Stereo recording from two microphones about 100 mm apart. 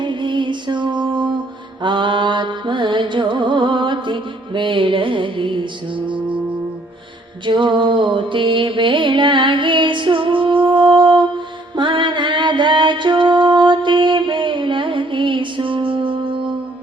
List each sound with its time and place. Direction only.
0.0 s music: 50° right (ahead or behind)
7.4 s music: 50° right (ahead or behind)